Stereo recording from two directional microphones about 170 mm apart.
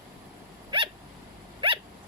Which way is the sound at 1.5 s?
30° right (ahead or behind).